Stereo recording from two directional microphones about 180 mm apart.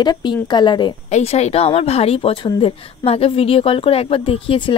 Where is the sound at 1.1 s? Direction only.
35° left (ahead or behind).